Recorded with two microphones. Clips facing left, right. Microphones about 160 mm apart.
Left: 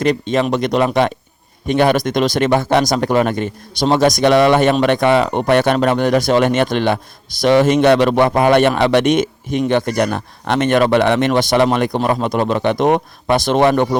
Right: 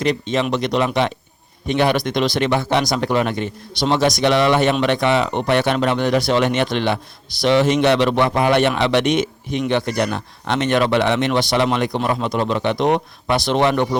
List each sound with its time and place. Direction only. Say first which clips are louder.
0.0 s speech: left 4 dB; 50° left (ahead or behind)